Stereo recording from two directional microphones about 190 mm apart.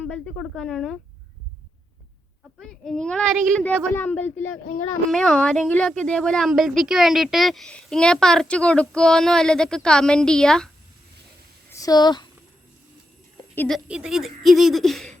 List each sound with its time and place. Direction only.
0.0 s a woman's voice: 5° left (ahead or behind)
2.6 s a woman's voice: 5° left (ahead or behind)
11.7 s speech: 20° left (ahead or behind)
13.6 s a woman's voice: centre (ahead or behind)